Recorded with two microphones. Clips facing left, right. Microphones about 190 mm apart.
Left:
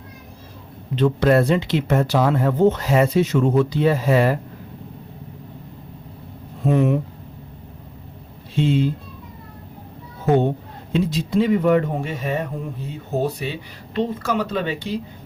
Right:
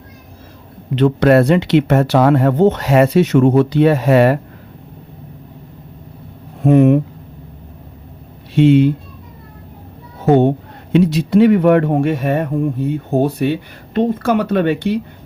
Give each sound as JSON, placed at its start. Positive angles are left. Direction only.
{"t": 0.9, "sound": "speech", "side_deg": -70}
{"t": 6.6, "sound": "speech", "side_deg": -60}
{"t": 8.5, "sound": "speech", "side_deg": -70}
{"t": 10.2, "sound": "speech", "side_deg": -65}